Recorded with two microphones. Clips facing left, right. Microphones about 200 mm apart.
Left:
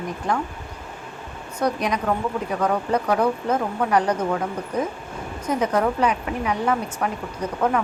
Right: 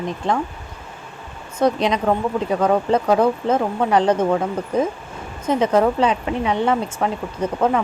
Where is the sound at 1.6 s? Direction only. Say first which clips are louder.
Right 5 dB; 25° right (ahead or behind).